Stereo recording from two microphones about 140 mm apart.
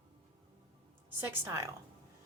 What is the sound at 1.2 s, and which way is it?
Speech, 20° right (ahead or behind).